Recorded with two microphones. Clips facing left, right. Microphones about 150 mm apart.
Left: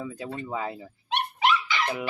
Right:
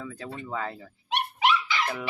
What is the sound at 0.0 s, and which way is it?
Speech, 15° left (ahead or behind).